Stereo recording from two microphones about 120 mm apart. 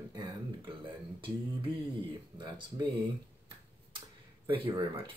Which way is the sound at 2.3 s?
40° right (ahead or behind).